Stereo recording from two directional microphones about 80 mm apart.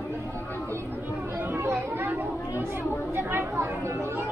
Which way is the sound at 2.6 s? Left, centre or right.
Right.